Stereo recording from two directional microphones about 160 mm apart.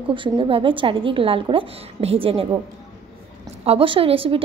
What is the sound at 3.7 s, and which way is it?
Speech, 35° right (ahead or behind).